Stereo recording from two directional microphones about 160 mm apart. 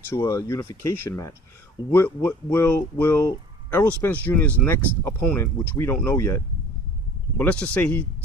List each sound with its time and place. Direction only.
0.1 s speech: 20° left (ahead or behind)